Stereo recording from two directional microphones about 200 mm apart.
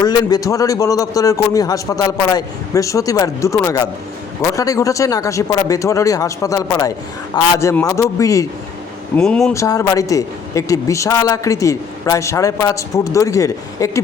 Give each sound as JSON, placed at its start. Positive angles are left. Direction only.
{"t": 0.0, "sound": "a man's voice", "side_deg": 20}
{"t": 9.1, "sound": "speech", "side_deg": 5}
{"t": 9.5, "sound": "a man's voice", "side_deg": 15}